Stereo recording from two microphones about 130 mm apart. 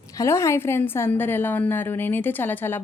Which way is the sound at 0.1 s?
25° left (ahead or behind).